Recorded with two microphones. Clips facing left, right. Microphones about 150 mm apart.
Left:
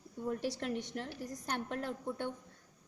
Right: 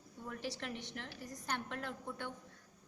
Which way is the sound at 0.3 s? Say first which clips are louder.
Left 7 dB; 45° left (ahead or behind).